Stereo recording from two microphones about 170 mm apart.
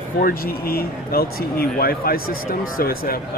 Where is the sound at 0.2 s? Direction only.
60° left (ahead or behind).